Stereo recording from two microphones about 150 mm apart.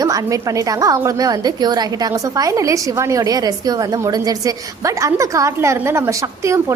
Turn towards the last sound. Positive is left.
turn(degrees=-20)  # may be behind; listen again after turning